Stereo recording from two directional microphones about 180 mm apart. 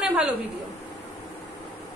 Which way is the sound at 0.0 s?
5° right (ahead or behind).